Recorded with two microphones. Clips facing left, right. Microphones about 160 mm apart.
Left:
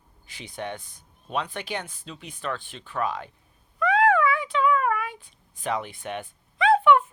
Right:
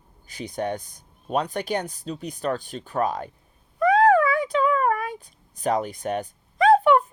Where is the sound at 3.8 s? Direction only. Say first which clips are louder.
Right 4 dB; 40° right (ahead or behind).